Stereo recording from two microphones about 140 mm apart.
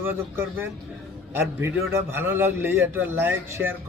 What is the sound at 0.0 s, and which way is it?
Speech, 15° right (ahead or behind).